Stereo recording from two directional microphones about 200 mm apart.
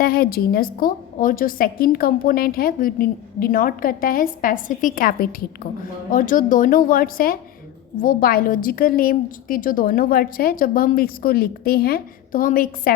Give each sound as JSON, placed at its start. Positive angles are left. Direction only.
{"t": 0.0, "sound": "a woman's voice", "side_deg": 45}